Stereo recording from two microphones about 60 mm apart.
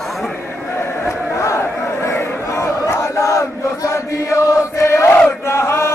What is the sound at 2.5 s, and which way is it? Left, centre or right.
Chant, left.